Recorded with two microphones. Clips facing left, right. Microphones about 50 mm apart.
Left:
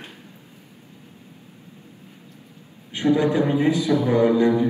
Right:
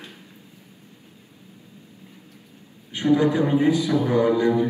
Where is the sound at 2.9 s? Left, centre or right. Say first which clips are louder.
Even; left.